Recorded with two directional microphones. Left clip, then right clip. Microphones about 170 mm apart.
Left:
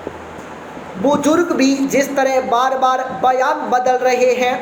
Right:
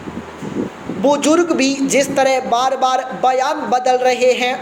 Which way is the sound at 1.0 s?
35° right (ahead or behind).